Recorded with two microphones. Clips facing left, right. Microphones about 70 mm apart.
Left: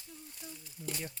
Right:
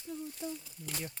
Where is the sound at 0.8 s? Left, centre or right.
Centre.